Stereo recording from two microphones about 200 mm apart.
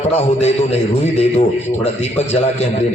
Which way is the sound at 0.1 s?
30° left (ahead or behind).